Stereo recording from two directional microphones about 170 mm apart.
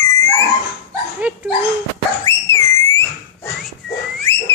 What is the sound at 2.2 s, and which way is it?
Whistle, 15° left (ahead or behind).